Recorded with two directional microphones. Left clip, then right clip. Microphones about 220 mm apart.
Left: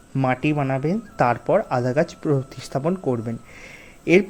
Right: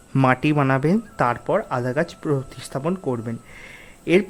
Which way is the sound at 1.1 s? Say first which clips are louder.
Left 5 dB; centre (ahead or behind).